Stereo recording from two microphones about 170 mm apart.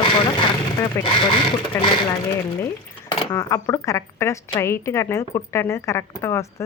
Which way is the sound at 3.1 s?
20° left (ahead or behind).